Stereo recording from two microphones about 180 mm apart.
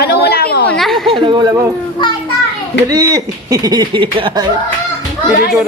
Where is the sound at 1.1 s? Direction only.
25° right (ahead or behind).